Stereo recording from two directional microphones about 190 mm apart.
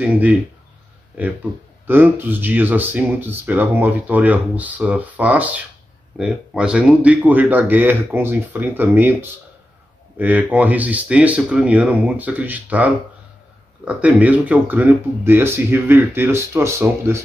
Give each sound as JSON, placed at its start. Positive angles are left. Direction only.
{"t": 0.0, "sound": "speech", "side_deg": -5}
{"t": 1.9, "sound": "speech", "side_deg": -10}